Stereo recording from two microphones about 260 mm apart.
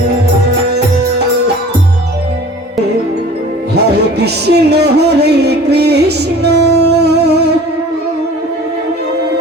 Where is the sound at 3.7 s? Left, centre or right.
Right.